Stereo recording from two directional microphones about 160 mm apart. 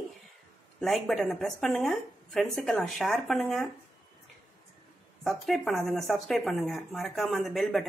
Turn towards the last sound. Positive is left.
turn(degrees=0)  # may be behind; listen again after turning